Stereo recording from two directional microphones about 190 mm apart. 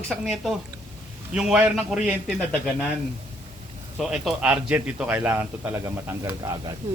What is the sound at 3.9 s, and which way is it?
A man's voice, centre (ahead or behind).